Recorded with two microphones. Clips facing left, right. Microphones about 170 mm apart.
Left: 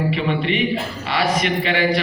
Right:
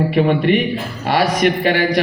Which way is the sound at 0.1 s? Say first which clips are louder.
Right 7 dB; 50° right (ahead or behind).